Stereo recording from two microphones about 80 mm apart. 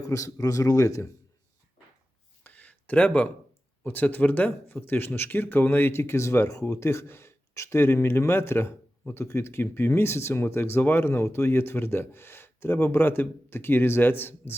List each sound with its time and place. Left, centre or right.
0.0 s speech: left
2.4 s a sound: centre
3.8 s speech: left